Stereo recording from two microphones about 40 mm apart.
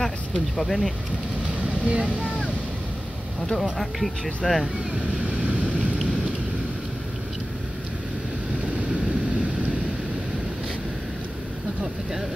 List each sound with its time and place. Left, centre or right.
0.6 s speech: centre
1.7 s vehicle: right
3.7 s speech: centre
4.9 s boat: right